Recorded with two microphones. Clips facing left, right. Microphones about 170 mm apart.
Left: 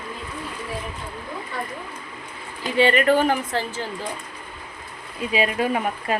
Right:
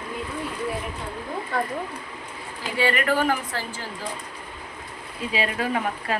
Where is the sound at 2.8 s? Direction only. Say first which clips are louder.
Left 5 dB; 25° left (ahead or behind).